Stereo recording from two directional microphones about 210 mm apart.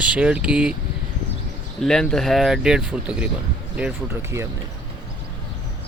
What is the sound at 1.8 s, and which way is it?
Speech, centre (ahead or behind).